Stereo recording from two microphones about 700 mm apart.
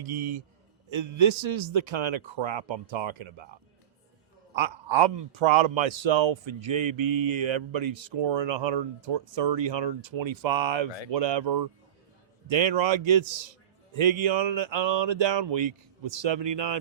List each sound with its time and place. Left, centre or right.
0.0 s a man's voice: right
4.5 s a sound: right
5.4 s speech: right